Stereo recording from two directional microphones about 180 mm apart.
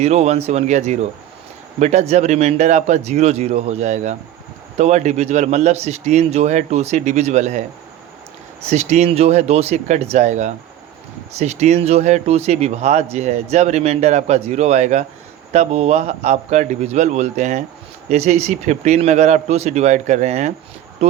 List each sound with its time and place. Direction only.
0.0 s speech: 35° right (ahead or behind)
8.6 s speech: 40° right (ahead or behind)